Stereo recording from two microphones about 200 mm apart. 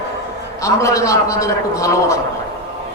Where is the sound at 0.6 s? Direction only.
15° left (ahead or behind).